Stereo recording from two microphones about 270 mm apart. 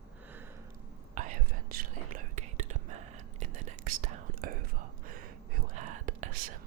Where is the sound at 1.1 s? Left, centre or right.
Right.